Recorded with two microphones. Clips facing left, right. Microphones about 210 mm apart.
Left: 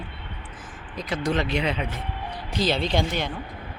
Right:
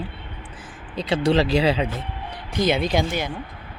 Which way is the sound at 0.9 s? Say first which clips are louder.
Right 6 dB; 30° right (ahead or behind).